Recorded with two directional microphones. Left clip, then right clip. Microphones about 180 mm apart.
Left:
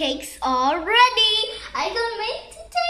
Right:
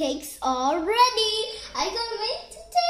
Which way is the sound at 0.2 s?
35° right (ahead or behind).